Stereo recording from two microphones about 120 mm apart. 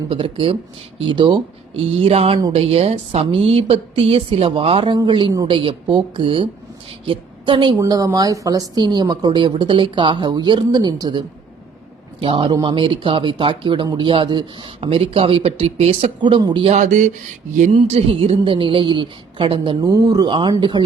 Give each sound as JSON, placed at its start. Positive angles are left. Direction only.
{"t": 0.1, "sound": "a woman's voice", "side_deg": -50}
{"t": 7.8, "sound": "speech", "side_deg": -30}
{"t": 12.2, "sound": "speech", "side_deg": -45}
{"t": 16.6, "sound": "speech", "side_deg": -80}
{"t": 17.7, "sound": "speech", "side_deg": -55}